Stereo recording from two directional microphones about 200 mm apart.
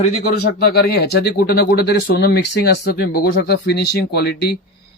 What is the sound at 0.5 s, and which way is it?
Speech, 50° left (ahead or behind).